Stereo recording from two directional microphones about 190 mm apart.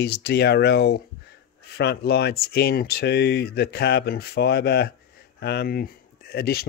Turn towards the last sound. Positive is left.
turn(degrees=55)  # may be behind; listen again after turning